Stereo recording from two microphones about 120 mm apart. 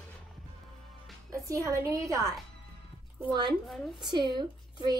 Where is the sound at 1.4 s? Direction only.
25° right (ahead or behind).